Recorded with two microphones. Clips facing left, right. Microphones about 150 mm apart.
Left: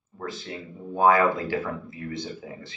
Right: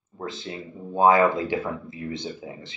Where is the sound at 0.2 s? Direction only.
20° right (ahead or behind).